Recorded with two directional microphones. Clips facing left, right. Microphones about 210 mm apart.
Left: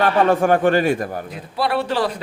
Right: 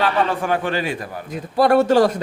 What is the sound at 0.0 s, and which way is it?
Speech, 50° left (ahead or behind).